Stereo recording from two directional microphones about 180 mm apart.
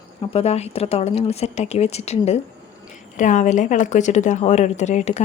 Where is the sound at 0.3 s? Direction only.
35° left (ahead or behind).